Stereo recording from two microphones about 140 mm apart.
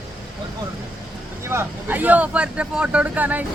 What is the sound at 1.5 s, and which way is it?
Speech, 15° right (ahead or behind).